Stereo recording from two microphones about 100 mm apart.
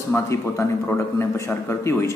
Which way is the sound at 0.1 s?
30° left (ahead or behind).